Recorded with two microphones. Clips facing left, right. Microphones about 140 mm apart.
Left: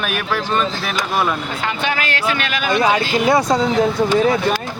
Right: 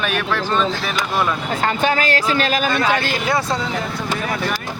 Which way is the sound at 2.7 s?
20° left (ahead or behind).